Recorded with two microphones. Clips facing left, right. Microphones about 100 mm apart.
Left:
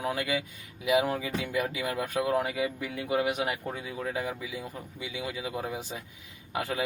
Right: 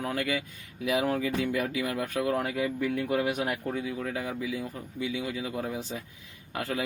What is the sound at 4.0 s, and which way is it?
Speech, 20° left (ahead or behind).